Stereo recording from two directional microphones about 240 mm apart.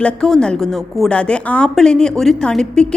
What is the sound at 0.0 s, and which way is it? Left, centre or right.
A woman's voice, centre.